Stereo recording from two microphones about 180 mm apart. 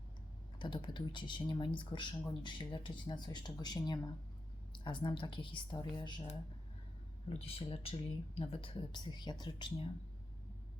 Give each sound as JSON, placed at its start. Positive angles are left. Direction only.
{"t": 0.6, "sound": "speech", "side_deg": 25}
{"t": 7.3, "sound": "speech", "side_deg": 35}